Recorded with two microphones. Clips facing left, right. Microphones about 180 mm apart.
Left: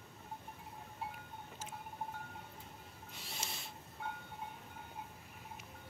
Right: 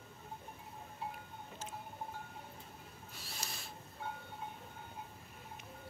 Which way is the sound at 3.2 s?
20° left (ahead or behind).